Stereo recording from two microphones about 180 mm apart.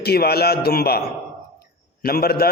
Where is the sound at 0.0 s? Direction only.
60° left (ahead or behind).